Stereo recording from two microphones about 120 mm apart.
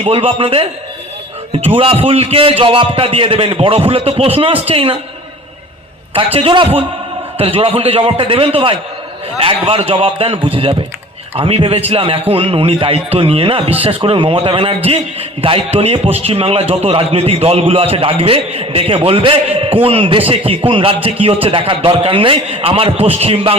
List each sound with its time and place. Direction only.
0.0 s a man's voice: 50° right (ahead or behind)
6.1 s a man's voice: 50° right (ahead or behind)